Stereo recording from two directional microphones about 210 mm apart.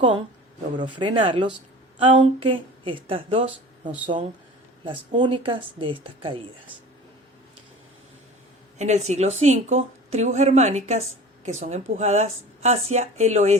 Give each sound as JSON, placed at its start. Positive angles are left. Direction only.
{"t": 0.8, "sound": "speech", "side_deg": -25}
{"t": 8.8, "sound": "a woman's voice", "side_deg": -35}